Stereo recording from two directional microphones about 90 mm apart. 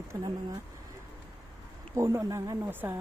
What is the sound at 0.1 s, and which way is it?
Speech, 35° right (ahead or behind).